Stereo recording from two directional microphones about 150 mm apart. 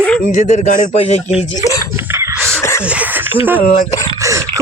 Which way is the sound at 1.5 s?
25° left (ahead or behind).